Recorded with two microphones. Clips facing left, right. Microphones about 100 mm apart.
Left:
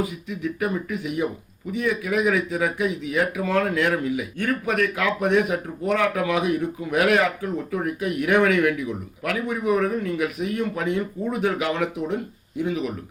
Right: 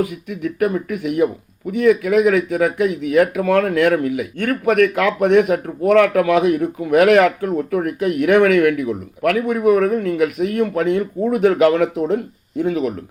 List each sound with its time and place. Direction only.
0.0 s speech: 65° right (ahead or behind)